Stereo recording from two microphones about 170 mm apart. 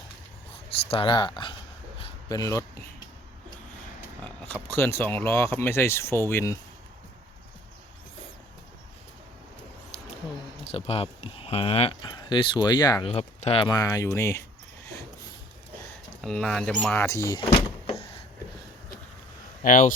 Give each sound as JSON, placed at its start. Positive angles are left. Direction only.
{"t": 0.9, "sound": "speech", "side_deg": 30}
{"t": 4.2, "sound": "speech", "side_deg": 10}
{"t": 10.6, "sound": "speech", "side_deg": 35}
{"t": 13.7, "sound": "speech", "side_deg": 20}
{"t": 16.2, "sound": "speech", "side_deg": 5}
{"t": 17.1, "sound": "speech", "side_deg": 15}
{"t": 19.6, "sound": "speech", "side_deg": 50}